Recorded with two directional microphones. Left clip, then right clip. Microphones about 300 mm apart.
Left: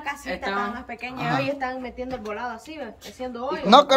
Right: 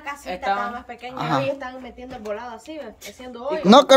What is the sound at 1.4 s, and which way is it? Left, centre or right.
A woman's voice, centre.